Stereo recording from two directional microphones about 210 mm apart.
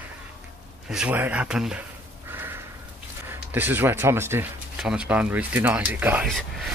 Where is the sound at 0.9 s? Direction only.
5° right (ahead or behind).